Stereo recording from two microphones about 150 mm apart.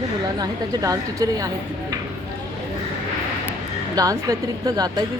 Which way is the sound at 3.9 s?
20° right (ahead or behind).